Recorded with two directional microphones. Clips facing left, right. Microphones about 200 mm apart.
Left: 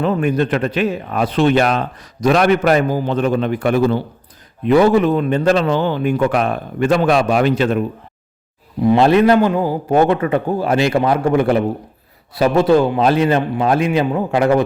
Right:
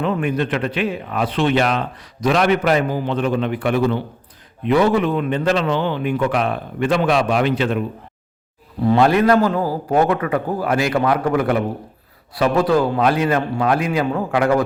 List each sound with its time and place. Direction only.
0.0 s a man's voice: 40° left (ahead or behind)
8.8 s a man's voice: 15° left (ahead or behind)